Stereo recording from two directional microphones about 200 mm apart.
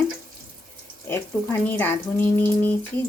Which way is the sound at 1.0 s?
10° left (ahead or behind).